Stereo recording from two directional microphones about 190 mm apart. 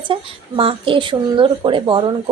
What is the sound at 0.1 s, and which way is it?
Speech, 30° right (ahead or behind).